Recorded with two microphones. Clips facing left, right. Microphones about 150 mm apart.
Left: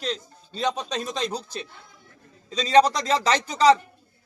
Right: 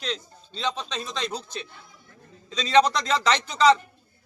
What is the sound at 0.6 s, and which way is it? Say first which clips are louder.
A man's voice: left 3 dB; 40° left (ahead or behind).